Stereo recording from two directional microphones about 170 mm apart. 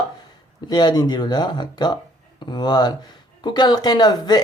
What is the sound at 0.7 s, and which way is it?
Speech, 25° left (ahead or behind).